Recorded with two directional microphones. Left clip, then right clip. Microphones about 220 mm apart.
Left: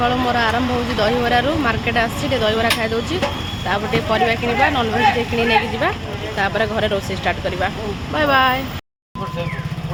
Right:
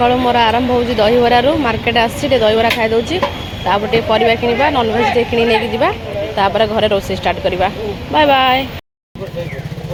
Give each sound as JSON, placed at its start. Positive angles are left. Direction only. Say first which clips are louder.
{"t": 0.0, "sound": "speech", "louder": "right 6 dB", "side_deg": -15}